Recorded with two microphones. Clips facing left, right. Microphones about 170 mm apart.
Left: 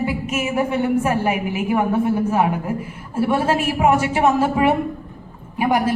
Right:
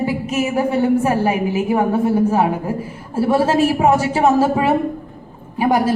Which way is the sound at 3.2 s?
30° right (ahead or behind).